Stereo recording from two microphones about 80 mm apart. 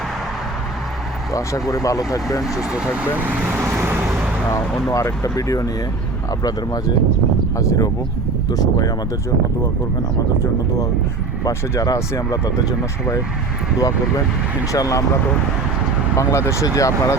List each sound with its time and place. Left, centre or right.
1.3 s speech: left
2.4 s speech: centre
3.5 s vehicle: right
4.9 s speech: left
7.6 s speech: left
8.4 s speech: left
11.4 s speech: left
14.7 s speech: left
16.1 s speech: left